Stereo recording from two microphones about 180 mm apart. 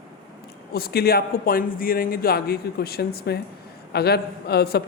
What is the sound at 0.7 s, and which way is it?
Speech, 60° left (ahead or behind).